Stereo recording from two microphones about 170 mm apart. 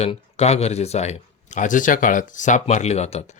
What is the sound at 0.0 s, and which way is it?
Speech, 40° left (ahead or behind).